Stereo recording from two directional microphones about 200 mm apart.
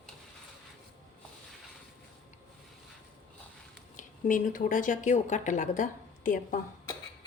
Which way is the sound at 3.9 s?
40° left (ahead or behind).